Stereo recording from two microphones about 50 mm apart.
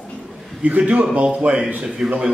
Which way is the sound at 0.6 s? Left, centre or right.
Right.